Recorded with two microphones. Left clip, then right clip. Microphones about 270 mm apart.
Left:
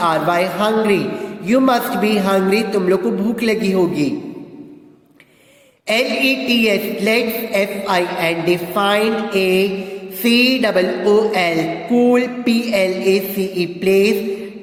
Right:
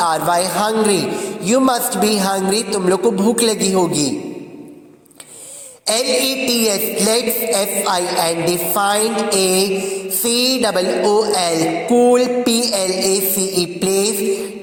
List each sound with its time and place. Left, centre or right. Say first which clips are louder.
0.0 s a woman's voice: even; right
5.9 s a woman's voice: left 1 dB; right